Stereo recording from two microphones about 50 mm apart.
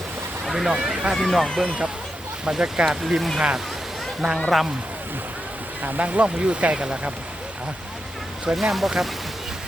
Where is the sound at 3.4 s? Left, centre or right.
Centre.